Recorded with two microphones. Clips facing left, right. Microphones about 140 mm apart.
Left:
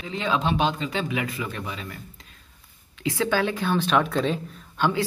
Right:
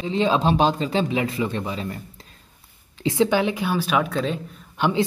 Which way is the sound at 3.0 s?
20° right (ahead or behind).